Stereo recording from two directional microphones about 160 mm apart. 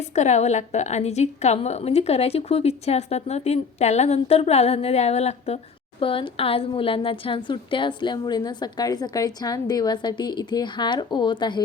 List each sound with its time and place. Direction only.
0.2 s a woman's voice: 45° left (ahead or behind); by 11.6 s 30° left (ahead or behind)